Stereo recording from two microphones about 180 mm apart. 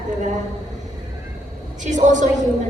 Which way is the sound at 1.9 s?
45° right (ahead or behind).